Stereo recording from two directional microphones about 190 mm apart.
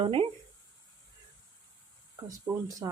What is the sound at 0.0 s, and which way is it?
Speech, 30° right (ahead or behind).